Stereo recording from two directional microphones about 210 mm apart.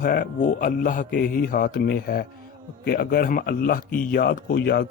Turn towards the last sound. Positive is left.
turn(degrees=50)  # may be behind; listen again after turning